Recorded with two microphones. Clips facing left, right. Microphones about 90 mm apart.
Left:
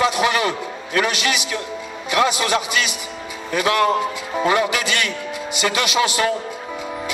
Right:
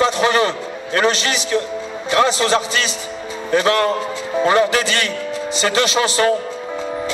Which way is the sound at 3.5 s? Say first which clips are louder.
Right 4 dB; 30° right (ahead or behind).